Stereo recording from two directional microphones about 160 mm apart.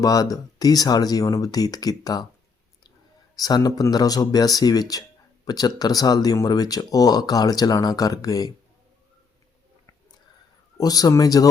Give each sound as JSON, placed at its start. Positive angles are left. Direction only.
{"t": 0.0, "sound": "speech", "side_deg": 20}
{"t": 3.3, "sound": "speech", "side_deg": 25}
{"t": 10.8, "sound": "speech", "side_deg": 25}